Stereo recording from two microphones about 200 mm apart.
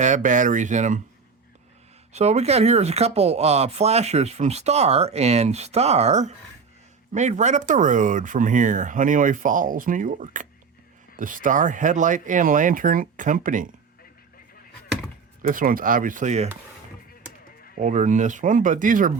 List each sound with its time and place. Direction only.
0.0 s speech: 40° right (ahead or behind)
2.1 s speech: 35° right (ahead or behind)
15.4 s speech: 45° right (ahead or behind)
17.7 s speech: 35° right (ahead or behind)